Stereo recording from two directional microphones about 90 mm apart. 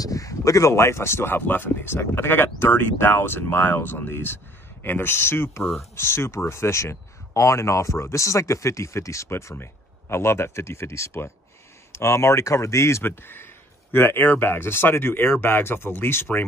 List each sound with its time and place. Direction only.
0.0 s speech: 40° left (ahead or behind)